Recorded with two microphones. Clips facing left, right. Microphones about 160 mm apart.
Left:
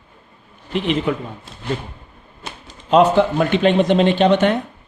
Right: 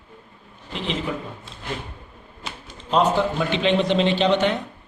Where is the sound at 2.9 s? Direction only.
65° left (ahead or behind).